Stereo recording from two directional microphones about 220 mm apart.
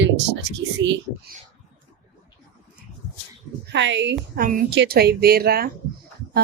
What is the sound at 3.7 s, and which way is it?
Speech, 55° right (ahead or behind).